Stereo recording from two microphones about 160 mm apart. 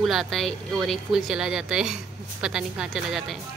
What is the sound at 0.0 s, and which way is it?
A woman's voice, centre (ahead or behind).